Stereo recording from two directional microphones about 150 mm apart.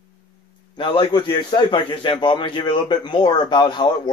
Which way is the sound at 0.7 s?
35° left (ahead or behind).